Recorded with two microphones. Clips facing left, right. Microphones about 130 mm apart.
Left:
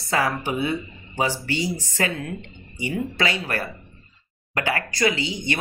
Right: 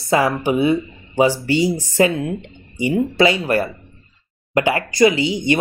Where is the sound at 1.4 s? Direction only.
20° right (ahead or behind).